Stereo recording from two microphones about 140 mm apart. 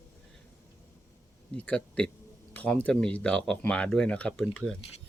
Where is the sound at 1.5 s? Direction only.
10° left (ahead or behind).